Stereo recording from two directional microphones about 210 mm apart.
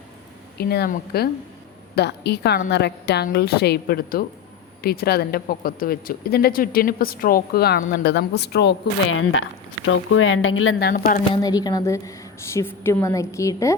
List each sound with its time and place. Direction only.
0.6 s speech: 50° left (ahead or behind); by 10.8 s 75° left (ahead or behind)
10.8 s speech: 45° left (ahead or behind)
11.3 s a woman's voice: 15° left (ahead or behind)